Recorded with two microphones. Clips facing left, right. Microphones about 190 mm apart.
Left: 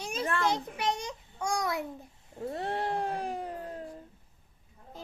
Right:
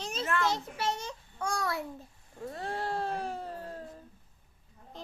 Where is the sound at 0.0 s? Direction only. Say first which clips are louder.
Left 2 dB; 10° left (ahead or behind).